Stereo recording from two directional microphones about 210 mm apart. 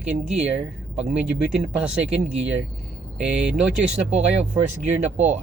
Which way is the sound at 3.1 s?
5° right (ahead or behind).